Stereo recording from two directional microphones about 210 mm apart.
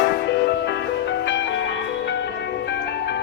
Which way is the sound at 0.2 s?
50° left (ahead or behind).